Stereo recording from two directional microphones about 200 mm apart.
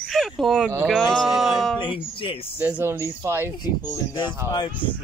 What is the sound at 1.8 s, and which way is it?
Speech, 25° left (ahead or behind).